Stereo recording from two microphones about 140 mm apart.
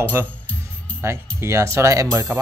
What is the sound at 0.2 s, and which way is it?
Speech, 20° right (ahead or behind).